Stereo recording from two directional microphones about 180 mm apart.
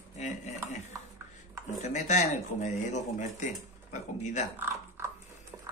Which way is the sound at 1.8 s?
40° left (ahead or behind).